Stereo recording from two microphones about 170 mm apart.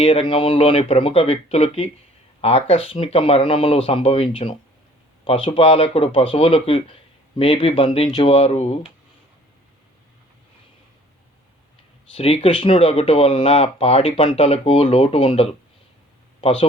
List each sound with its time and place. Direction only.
0.0 s speech: 30° left (ahead or behind)
12.1 s speech: 35° left (ahead or behind)